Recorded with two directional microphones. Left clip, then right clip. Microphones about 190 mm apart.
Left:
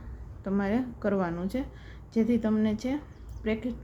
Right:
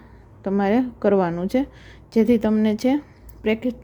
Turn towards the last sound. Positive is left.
turn(degrees=-45)  # may be behind; listen again after turning